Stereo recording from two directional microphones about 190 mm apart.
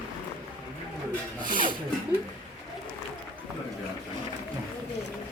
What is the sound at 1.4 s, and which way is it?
Rub, 45° right (ahead or behind).